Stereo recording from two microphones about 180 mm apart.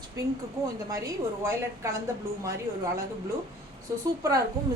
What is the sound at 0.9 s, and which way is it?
Speech, 20° right (ahead or behind).